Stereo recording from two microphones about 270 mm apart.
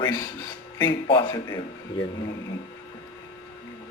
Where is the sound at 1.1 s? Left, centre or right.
Centre.